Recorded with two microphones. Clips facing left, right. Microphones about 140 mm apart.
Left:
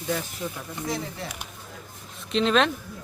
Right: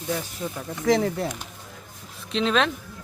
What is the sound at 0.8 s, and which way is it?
Speech, 90° right.